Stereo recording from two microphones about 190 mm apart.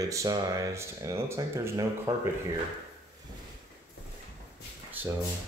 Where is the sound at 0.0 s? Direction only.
15° right (ahead or behind).